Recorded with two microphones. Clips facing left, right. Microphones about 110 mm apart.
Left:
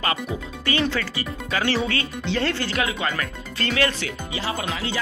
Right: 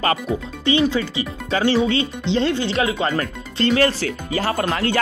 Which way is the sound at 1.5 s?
30° right (ahead or behind).